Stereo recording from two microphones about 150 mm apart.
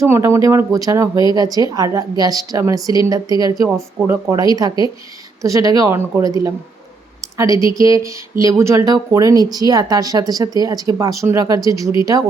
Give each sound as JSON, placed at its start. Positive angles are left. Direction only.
{"t": 0.0, "sound": "speech", "side_deg": -20}